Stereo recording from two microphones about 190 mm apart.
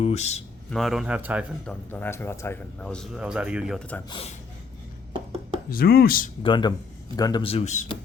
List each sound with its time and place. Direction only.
0.0 s a man's voice: 35° left (ahead or behind)
0.7 s speech: centre (ahead or behind)
1.6 s speech: 10° left (ahead or behind)
4.1 s a man's voice: 30° left (ahead or behind)
5.7 s speech: 55° left (ahead or behind)
6.4 s a man's voice: 25° left (ahead or behind)